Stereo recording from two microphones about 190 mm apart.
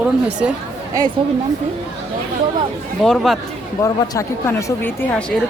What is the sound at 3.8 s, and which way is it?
Speech, 15° left (ahead or behind).